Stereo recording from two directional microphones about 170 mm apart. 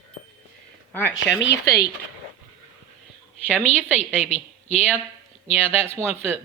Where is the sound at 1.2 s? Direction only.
90° left.